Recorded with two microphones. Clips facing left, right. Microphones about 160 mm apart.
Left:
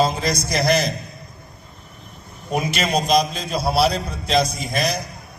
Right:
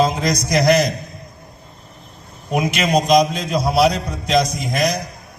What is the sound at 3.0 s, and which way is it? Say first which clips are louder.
A man's voice: right 4 dB; 30° left (ahead or behind).